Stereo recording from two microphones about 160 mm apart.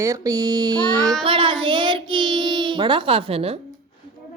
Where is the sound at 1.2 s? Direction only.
35° right (ahead or behind).